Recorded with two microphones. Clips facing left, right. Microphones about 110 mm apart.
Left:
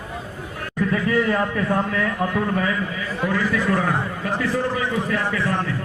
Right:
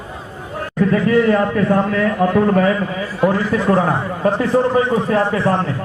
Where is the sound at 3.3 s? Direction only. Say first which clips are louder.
Right 4 dB; 30° right (ahead or behind).